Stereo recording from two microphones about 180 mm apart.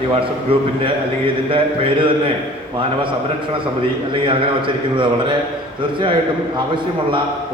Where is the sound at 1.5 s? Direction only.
30° right (ahead or behind).